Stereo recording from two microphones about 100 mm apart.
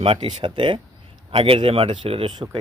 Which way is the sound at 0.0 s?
70° right (ahead or behind).